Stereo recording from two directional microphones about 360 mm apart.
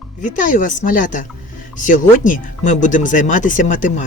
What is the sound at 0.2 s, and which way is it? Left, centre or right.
Speech, left.